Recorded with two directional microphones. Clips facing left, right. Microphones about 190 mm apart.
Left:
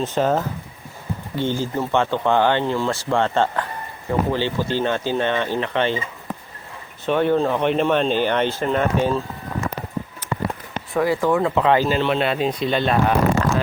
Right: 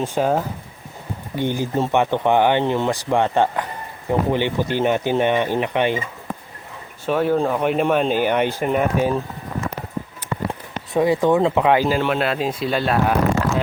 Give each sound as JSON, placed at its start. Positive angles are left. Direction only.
{"t": 0.0, "sound": "speech", "side_deg": -10}
{"t": 7.0, "sound": "speech", "side_deg": -5}
{"t": 10.9, "sound": "speech", "side_deg": -20}